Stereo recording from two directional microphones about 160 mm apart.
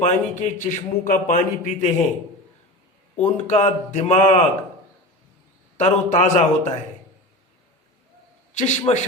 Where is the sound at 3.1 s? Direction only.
45° left (ahead or behind).